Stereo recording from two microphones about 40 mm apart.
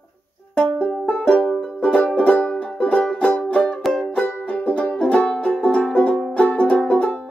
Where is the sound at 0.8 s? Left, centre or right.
Left.